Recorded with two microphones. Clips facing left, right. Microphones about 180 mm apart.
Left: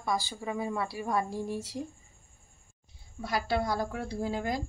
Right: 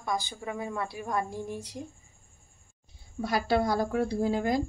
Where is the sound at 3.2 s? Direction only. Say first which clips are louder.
Right 4 dB; 45° right (ahead or behind).